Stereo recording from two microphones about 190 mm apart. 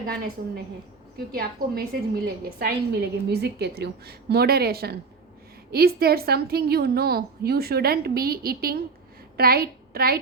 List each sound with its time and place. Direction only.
0.1 s a woman's voice: 50° right (ahead or behind)